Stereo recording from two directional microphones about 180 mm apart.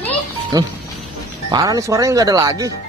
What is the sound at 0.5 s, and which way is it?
Speech, 20° right (ahead or behind).